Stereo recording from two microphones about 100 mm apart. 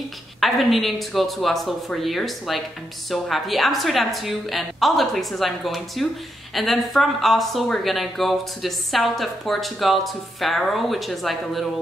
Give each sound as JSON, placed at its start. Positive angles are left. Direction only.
{"t": 0.4, "sound": "speech", "side_deg": 0}